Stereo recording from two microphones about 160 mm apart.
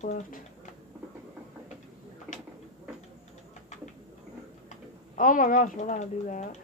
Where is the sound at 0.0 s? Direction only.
50° left (ahead or behind).